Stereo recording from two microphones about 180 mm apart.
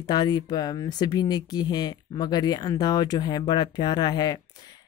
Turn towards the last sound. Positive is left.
turn(degrees=25)  # may be behind; listen again after turning